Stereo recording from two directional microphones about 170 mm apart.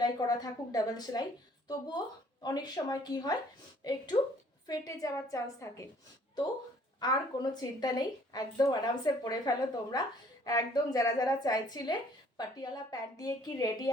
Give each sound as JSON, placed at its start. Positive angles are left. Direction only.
{"t": 0.0, "sound": "a woman's voice", "side_deg": 25}
{"t": 7.0, "sound": "a woman's voice", "side_deg": 25}